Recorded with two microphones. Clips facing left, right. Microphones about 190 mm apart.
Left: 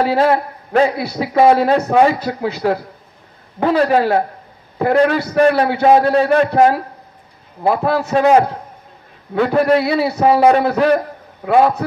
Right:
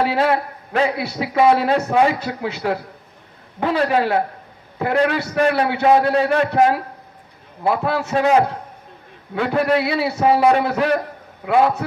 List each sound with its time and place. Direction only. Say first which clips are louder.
0.0 s a man's voice: left 4 dB; 40° left (ahead or behind)